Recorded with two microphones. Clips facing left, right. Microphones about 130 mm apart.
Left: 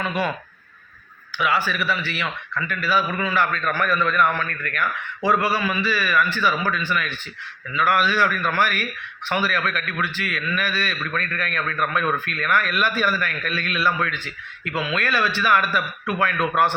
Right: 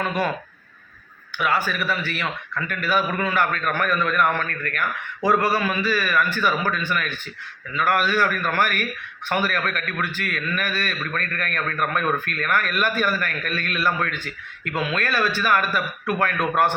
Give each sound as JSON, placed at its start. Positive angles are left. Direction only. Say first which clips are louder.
{"t": 0.0, "sound": "a man's voice", "louder": "right 1 dB", "side_deg": -45}
{"t": 1.4, "sound": "a man's voice", "louder": "even", "side_deg": -45}